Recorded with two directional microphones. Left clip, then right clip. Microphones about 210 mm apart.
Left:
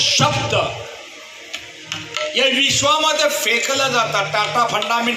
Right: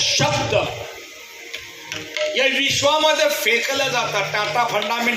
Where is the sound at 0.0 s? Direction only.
15° left (ahead or behind).